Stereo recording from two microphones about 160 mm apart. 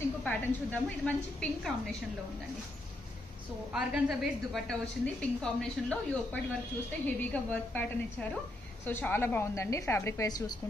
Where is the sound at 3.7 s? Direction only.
5° right (ahead or behind).